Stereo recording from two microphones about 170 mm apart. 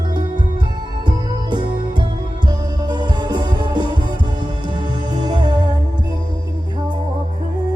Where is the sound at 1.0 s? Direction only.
25° right (ahead or behind).